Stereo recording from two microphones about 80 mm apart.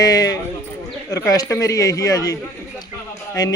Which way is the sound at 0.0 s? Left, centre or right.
Left.